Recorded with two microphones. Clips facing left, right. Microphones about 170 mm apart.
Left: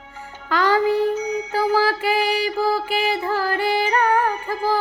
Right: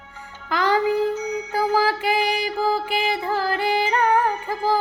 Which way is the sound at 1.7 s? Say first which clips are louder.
Even; 15° right (ahead or behind).